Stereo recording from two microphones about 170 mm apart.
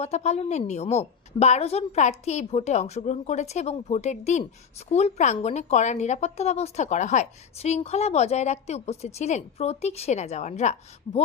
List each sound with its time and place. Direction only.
0.0 s speech: 40° left (ahead or behind)